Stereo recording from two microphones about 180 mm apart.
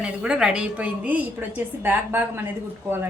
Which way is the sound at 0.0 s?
5° right (ahead or behind).